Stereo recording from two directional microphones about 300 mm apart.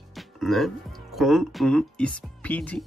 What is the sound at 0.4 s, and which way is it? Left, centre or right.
Speech, centre.